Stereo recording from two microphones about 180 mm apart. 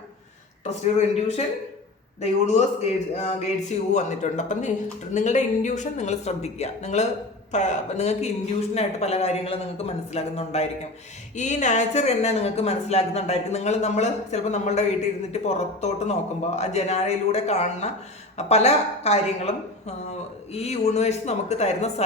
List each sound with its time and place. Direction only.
0.6 s speech: 40° left (ahead or behind)